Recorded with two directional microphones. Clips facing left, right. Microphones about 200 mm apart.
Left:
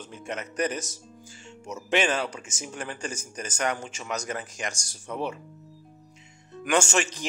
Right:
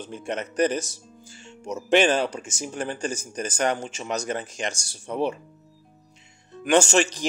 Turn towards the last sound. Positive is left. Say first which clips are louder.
# right 5 dB
turn(degrees=-35)  # may be behind; listen again after turning